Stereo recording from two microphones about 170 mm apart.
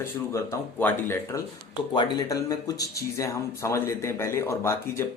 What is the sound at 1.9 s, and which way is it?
Speech, 25° left (ahead or behind).